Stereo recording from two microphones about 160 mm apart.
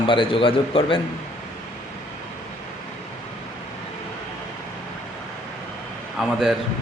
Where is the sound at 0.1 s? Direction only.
35° left (ahead or behind).